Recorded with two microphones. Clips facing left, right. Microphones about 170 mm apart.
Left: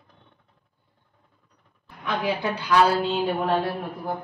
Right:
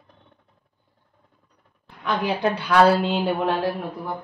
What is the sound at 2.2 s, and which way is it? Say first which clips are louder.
Speech: right 3 dB; 70° right (ahead or behind).